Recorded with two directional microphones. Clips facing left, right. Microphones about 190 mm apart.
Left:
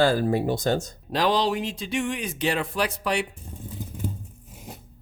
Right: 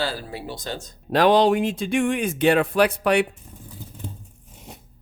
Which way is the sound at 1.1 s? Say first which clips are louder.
Right 6 dB; 60° right (ahead or behind).